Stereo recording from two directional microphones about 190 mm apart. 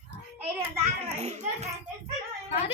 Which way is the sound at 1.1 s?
35° right (ahead or behind).